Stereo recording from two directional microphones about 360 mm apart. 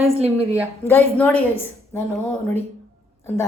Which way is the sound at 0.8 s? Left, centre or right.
Centre.